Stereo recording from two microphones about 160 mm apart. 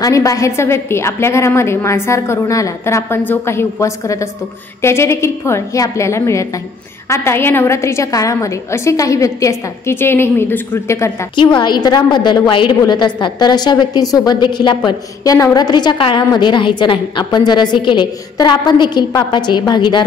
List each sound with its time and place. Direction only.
0.0 s a woman's voice: 20° left (ahead or behind)
11.3 s a woman's voice: 30° left (ahead or behind)